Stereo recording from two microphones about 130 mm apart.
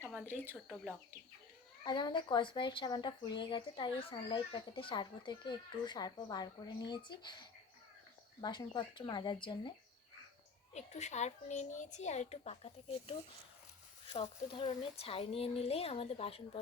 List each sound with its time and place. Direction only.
0.3 s speech: 15° right (ahead or behind)
1.8 s speech: 35° left (ahead or behind)
10.8 s a child's voice: 60° left (ahead or behind)